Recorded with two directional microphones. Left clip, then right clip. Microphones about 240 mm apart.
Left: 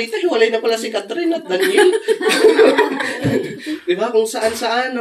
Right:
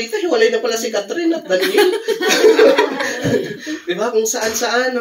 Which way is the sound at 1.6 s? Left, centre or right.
Centre.